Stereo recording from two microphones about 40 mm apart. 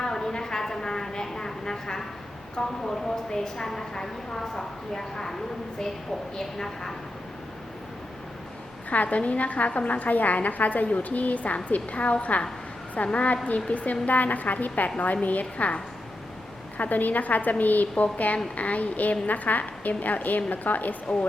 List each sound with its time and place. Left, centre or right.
0.0 s a sound: centre
2.6 s a woman's voice: centre
8.9 s a woman's voice: left